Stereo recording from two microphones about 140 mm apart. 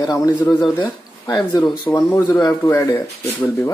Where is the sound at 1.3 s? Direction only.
25° left (ahead or behind).